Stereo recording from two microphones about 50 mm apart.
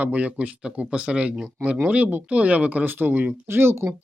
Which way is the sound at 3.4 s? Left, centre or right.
Right.